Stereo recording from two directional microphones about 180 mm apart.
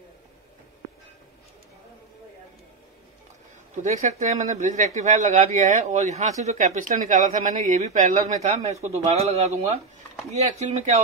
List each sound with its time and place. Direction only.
3.7 s speech: 40° right (ahead or behind)